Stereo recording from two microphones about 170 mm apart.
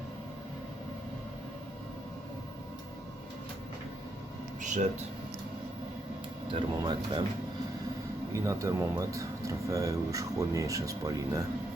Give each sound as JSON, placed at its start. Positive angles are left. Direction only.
{"t": 4.6, "sound": "speech", "side_deg": -45}
{"t": 6.5, "sound": "speech", "side_deg": -30}
{"t": 8.3, "sound": "speech", "side_deg": -20}